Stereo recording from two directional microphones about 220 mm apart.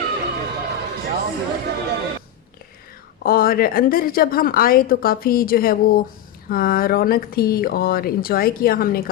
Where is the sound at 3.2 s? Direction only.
40° left (ahead or behind).